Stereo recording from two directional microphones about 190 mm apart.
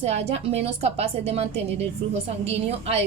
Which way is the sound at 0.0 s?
35° right (ahead or behind).